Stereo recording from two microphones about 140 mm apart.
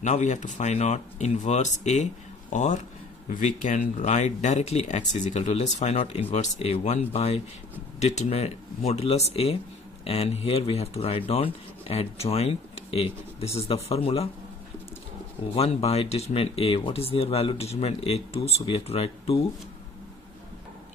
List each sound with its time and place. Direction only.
0.0 s speech: 60° left (ahead or behind)
15.5 s speech: 45° left (ahead or behind)